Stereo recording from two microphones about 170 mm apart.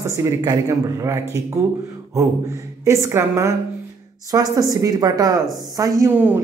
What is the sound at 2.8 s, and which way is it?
A man's voice, 15° right (ahead or behind).